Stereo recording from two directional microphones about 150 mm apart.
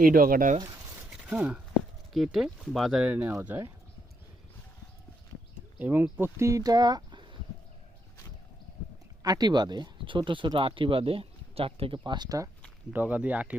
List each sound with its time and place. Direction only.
0.0 s speech: 75° right (ahead or behind)
1.1 s a sound: 5° right (ahead or behind)
2.1 s speech: centre (ahead or behind)
5.8 s speech: 15° right (ahead or behind); by 7.3 s 30° right (ahead or behind)
9.2 s speech: 25° right (ahead or behind)
12.9 s speech: 10° right (ahead or behind)